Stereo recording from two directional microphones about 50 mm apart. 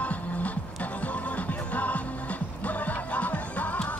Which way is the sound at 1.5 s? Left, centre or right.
Left.